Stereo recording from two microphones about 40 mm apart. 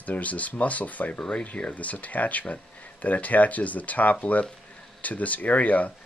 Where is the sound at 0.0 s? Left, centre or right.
Left.